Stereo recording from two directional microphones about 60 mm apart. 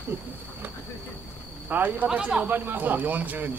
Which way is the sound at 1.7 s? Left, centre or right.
Right.